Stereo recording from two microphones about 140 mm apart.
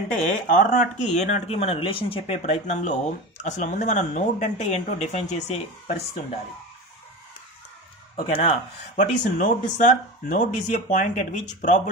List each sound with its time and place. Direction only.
0.5 s speech: 75° left (ahead or behind); by 6.0 s 55° left (ahead or behind)
8.2 s speech: 40° left (ahead or behind)
8.9 s speech: 65° left (ahead or behind)